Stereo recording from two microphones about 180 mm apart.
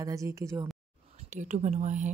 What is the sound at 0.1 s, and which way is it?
Speech, 15° right (ahead or behind).